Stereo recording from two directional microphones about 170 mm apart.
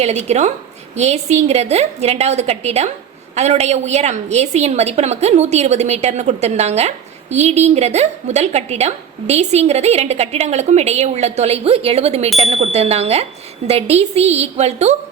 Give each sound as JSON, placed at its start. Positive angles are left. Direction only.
{"t": 0.0, "sound": "a woman's voice", "side_deg": -40}